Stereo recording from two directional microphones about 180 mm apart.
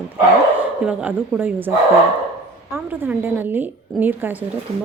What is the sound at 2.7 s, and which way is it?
A woman's voice, 10° right (ahead or behind).